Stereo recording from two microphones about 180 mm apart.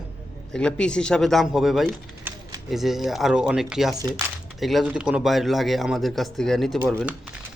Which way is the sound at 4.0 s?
20° right (ahead or behind).